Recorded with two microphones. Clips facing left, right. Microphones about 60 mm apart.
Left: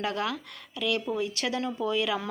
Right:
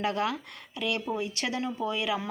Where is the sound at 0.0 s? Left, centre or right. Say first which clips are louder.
Right 1 dB; right.